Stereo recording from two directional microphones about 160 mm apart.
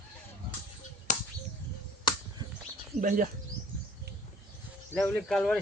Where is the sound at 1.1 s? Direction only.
50° left (ahead or behind).